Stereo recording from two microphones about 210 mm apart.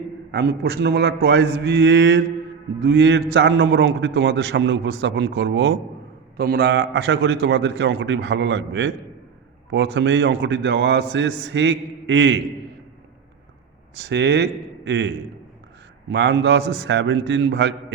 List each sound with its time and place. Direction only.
0.3 s a man's voice: 50° right (ahead or behind)
14.0 s a man's voice: 55° right (ahead or behind)